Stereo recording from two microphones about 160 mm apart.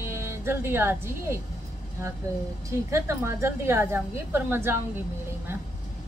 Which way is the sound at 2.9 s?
15° right (ahead or behind).